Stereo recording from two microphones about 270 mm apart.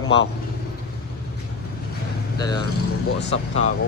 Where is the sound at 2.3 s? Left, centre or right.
Centre.